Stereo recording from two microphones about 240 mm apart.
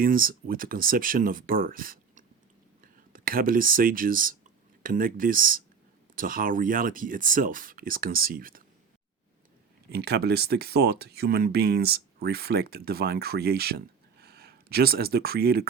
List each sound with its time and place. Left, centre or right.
0.0 s speech: right
9.9 s speech: right